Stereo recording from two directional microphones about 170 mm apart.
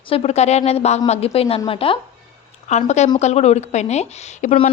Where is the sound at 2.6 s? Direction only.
45° left (ahead or behind).